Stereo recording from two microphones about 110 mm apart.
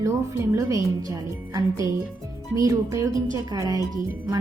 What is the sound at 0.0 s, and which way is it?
A woman's voice, 30° right (ahead or behind).